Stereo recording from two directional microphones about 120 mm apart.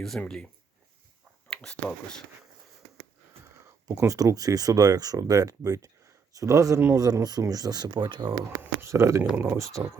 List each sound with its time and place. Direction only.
0.0 s speech: 5° left (ahead or behind)
1.5 s speech: 5° left (ahead or behind)
3.8 s speech: 25° right (ahead or behind)